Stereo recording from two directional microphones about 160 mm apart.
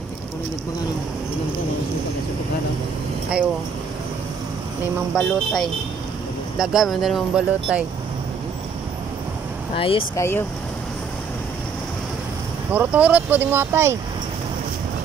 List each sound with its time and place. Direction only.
5.1 s speech: centre (ahead or behind)
9.8 s speech: 35° left (ahead or behind)
10.1 s speech: 15° left (ahead or behind)
12.7 s speech: 10° right (ahead or behind)